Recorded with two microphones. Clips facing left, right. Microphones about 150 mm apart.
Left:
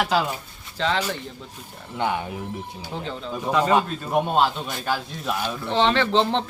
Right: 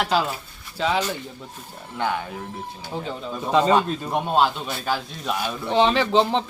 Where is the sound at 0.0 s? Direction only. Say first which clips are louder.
Even; centre (ahead or behind).